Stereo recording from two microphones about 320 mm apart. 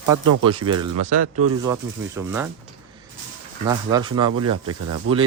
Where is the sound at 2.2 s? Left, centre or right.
Centre.